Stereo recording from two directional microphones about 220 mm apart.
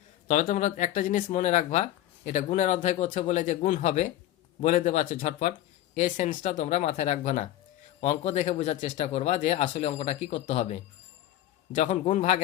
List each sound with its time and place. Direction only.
0.3 s speech: 35° left (ahead or behind)